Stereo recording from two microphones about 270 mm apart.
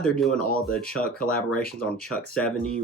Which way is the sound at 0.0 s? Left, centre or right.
Centre.